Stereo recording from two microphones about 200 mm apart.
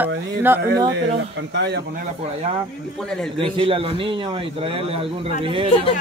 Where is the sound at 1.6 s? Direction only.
60° right (ahead or behind).